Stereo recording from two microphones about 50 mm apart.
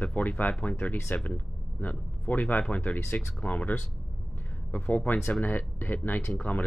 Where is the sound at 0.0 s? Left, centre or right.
Left.